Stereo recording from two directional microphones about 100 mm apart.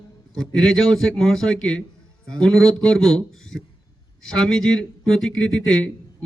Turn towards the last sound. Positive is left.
turn(degrees=5)  # may be behind; listen again after turning